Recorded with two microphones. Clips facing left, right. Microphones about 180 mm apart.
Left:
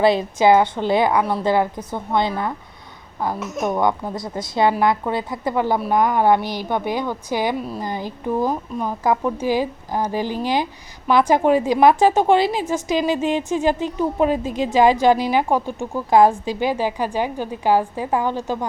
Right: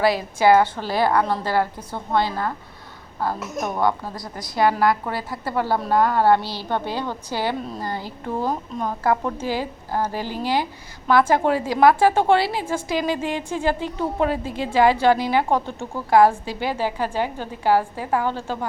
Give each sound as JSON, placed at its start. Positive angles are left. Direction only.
{"t": 0.0, "sound": "a woman's voice", "side_deg": 25}
{"t": 3.8, "sound": "a woman's voice", "side_deg": 20}